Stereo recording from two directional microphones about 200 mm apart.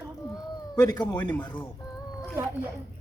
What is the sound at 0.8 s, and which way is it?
Speech, 20° left (ahead or behind).